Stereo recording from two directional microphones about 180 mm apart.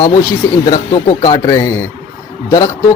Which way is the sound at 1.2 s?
20° left (ahead or behind).